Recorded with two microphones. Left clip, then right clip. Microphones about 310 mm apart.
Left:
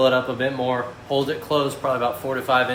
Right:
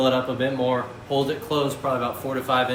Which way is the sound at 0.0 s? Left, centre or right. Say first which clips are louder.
Left 3 dB; left.